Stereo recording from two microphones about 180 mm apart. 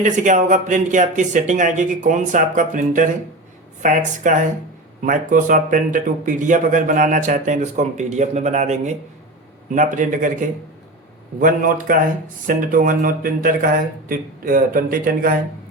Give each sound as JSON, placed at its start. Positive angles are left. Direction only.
{"t": 0.0, "sound": "speech", "side_deg": -45}